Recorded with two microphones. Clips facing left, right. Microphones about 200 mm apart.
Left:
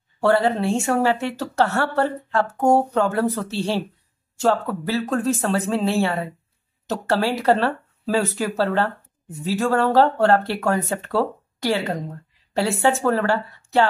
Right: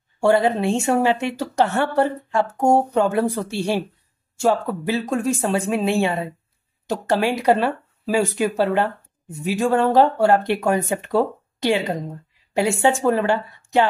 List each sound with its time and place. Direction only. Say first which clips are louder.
0.2 s a woman's voice: right 1 dB; 15° right (ahead or behind)